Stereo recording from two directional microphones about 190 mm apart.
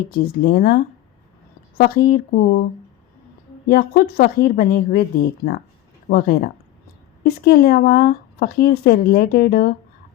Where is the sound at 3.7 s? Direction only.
55° left (ahead or behind).